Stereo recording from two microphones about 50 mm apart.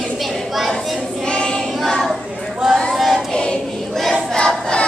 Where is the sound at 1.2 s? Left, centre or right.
Centre.